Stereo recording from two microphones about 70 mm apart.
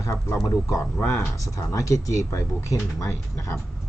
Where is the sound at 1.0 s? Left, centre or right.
Left.